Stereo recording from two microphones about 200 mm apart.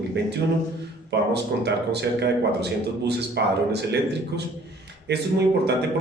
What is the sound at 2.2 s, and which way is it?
A man's voice, 55° right (ahead or behind).